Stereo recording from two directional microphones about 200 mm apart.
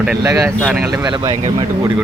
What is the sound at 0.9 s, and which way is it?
Speech, 20° right (ahead or behind).